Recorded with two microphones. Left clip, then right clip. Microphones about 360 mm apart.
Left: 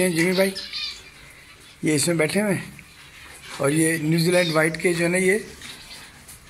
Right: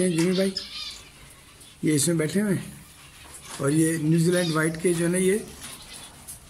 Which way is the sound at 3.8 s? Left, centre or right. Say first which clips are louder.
Left 2 dB; left.